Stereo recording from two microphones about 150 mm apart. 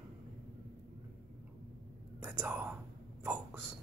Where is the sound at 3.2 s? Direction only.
10° right (ahead or behind).